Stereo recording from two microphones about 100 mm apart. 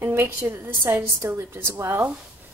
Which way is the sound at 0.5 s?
25° right (ahead or behind).